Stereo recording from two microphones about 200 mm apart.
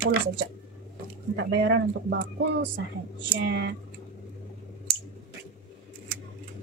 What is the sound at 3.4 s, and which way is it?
Speech, 60° right (ahead or behind).